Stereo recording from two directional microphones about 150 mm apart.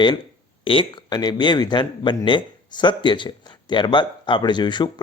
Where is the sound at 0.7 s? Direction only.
35° left (ahead or behind).